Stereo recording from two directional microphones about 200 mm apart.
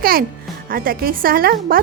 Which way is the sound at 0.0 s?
45° right (ahead or behind).